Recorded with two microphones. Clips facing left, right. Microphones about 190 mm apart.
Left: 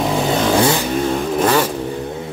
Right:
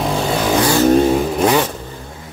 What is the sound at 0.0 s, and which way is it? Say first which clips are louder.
Vehicle: left 1 dB; centre (ahead or behind).